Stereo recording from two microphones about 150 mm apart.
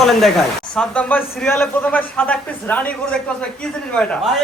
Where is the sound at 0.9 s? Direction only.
10° left (ahead or behind).